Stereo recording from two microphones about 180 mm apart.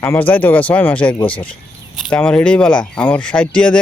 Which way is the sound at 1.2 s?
30° left (ahead or behind).